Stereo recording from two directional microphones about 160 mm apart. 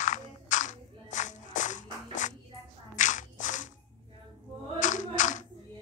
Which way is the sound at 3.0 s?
50° left (ahead or behind).